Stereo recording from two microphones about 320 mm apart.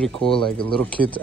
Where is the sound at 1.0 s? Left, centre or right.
Right.